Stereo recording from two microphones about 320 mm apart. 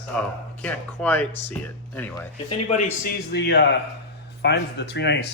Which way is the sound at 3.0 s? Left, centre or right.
Left.